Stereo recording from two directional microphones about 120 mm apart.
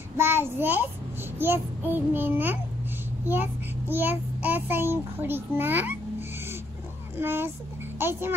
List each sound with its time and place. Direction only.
0.2 s a child's voice: 20° right (ahead or behind)
3.9 s a child's voice: 15° right (ahead or behind)
7.2 s a child's voice: 20° right (ahead or behind)